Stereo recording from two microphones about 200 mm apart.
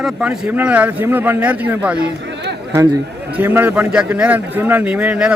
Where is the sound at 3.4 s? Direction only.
10° right (ahead or behind).